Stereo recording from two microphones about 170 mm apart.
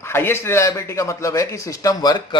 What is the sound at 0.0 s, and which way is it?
A man's voice, 15° left (ahead or behind).